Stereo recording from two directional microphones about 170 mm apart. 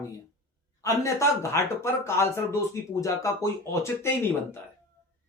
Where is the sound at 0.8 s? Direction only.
20° left (ahead or behind).